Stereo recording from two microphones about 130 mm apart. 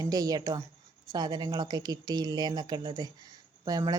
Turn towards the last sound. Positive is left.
turn(degrees=-30)  # may be behind; listen again after turning